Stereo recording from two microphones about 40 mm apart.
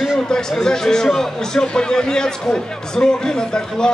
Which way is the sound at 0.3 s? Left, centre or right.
Centre.